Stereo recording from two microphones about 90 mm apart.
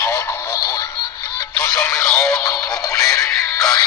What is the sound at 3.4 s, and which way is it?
Synthetic singing, 40° left (ahead or behind).